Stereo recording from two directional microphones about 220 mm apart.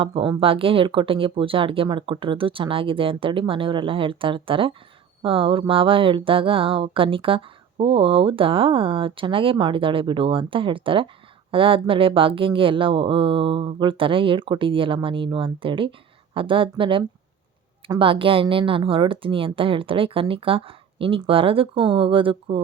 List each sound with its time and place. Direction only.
0.0 s speech: 25° right (ahead or behind)